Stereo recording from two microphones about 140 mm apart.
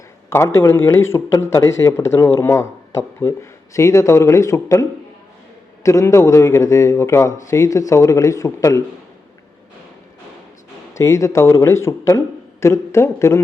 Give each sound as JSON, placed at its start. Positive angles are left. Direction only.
{"t": 0.3, "sound": "a man's voice", "side_deg": 20}
{"t": 10.9, "sound": "a man's voice", "side_deg": 20}